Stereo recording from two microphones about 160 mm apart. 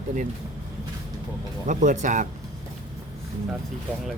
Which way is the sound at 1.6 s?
50° right (ahead or behind).